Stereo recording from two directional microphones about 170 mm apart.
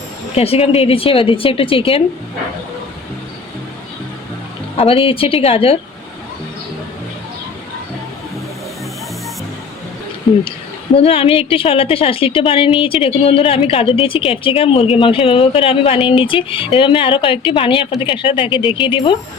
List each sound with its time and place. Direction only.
0.3 s a woman's voice: 35° left (ahead or behind)
4.8 s a woman's voice: 35° left (ahead or behind)
10.9 s a woman's voice: 35° left (ahead or behind)